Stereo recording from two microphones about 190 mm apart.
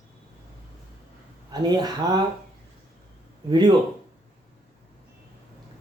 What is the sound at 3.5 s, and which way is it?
Speech, 20° right (ahead or behind).